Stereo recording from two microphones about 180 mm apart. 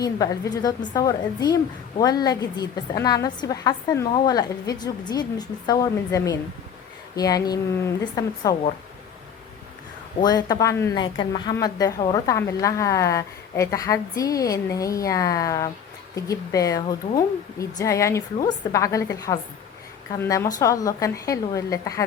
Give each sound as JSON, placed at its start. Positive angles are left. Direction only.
{"t": 0.0, "sound": "a woman's voice", "side_deg": 20}
{"t": 10.2, "sound": "a woman's voice", "side_deg": 20}